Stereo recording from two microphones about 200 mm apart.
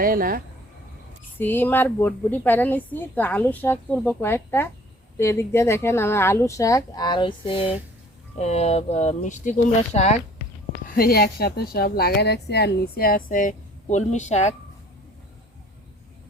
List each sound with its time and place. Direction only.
0.0 s speech: 45° right (ahead or behind)
1.4 s a woman's voice: 10° left (ahead or behind); by 10.2 s 35° left (ahead or behind)
10.8 s speech: 45° left (ahead or behind)